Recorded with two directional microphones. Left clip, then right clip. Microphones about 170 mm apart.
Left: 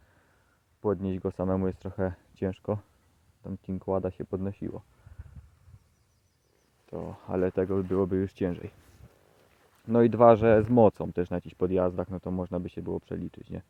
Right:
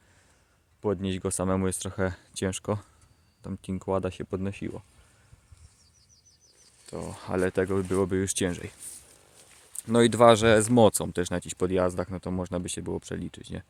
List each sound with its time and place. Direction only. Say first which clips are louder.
0.8 s speech: even; 15° right (ahead or behind)
6.8 s speech: right 1 dB; 15° right (ahead or behind)
9.4 s a sound: right 6 dB; 50° left (ahead or behind)
9.8 s speech: right 1 dB; 10° right (ahead or behind)